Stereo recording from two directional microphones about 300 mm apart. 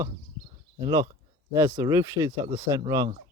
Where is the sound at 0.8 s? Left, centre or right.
Centre.